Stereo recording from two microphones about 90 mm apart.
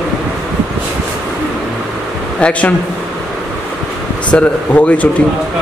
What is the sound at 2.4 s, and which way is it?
Speech, 15° left (ahead or behind).